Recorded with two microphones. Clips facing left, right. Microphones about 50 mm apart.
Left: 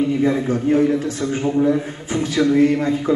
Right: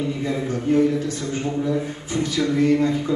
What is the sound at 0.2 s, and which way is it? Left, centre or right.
Speech, left.